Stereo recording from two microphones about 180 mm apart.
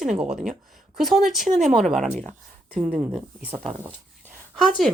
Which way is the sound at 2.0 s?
40° right (ahead or behind).